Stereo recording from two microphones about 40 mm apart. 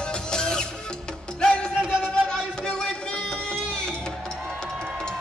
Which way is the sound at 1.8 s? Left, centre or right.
Right.